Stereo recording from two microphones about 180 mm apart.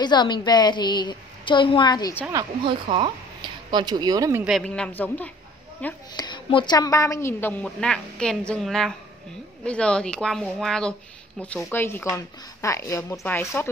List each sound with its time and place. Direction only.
0.0 s a woman's voice: 25° left (ahead or behind)
2.3 s speech: 25° right (ahead or behind)
4.5 s a woman's voice: 5° left (ahead or behind)
6.1 s a woman's voice: 25° left (ahead or behind)